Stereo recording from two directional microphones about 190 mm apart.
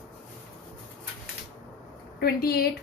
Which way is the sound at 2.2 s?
55° left (ahead or behind).